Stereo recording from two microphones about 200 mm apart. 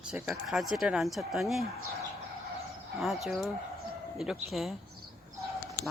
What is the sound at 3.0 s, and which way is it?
Speech, centre (ahead or behind).